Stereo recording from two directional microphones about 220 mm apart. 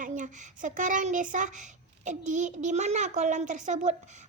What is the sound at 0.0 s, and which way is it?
A woman's voice, 35° right (ahead or behind).